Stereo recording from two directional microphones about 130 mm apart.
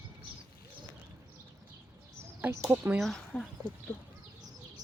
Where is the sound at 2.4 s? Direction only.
20° right (ahead or behind).